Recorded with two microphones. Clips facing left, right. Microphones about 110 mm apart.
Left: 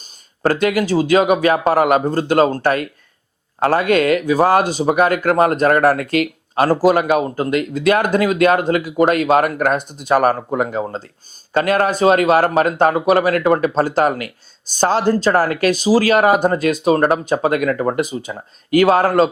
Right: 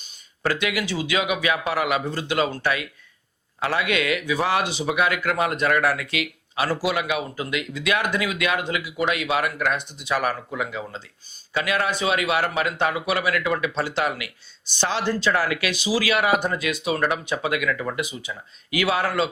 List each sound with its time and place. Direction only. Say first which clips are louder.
0.0 s speech: left 8 dB; 45° left (ahead or behind)